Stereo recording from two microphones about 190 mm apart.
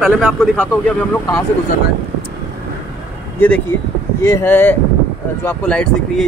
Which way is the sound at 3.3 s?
10° left (ahead or behind).